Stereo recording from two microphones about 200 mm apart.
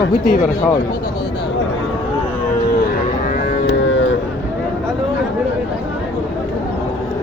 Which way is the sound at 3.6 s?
70° left (ahead or behind).